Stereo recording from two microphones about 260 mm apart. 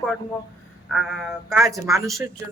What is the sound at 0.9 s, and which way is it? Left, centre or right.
Speech, centre.